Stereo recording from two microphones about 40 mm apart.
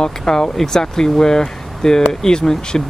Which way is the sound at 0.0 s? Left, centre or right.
Centre.